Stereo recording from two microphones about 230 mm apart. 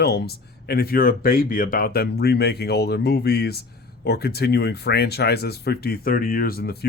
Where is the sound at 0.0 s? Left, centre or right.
Left.